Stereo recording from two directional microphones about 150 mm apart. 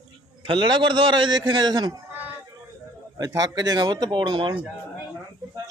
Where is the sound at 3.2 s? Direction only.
25° right (ahead or behind).